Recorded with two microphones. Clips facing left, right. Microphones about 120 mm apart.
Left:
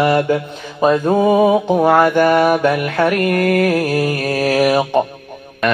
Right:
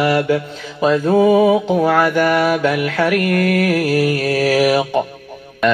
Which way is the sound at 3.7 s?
20° left (ahead or behind).